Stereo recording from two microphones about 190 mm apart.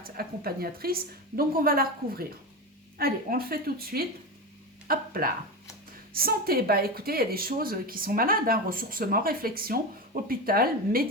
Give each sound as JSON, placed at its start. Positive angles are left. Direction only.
{"t": 0.0, "sound": "speech", "side_deg": -50}